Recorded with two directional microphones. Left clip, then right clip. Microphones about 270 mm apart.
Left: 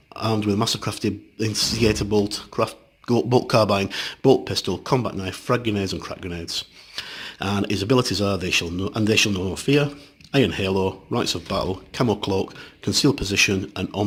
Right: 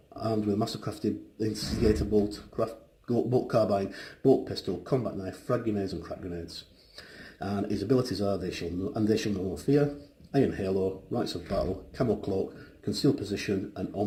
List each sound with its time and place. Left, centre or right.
0.2 s speech: left
3.1 s speech: left